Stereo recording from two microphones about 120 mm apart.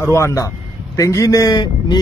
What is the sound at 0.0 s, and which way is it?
A man's voice, 25° left (ahead or behind).